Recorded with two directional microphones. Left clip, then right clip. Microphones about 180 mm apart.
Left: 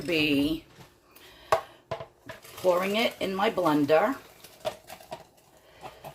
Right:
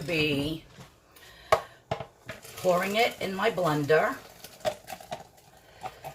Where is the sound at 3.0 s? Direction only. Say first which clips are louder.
Even; 55° left (ahead or behind).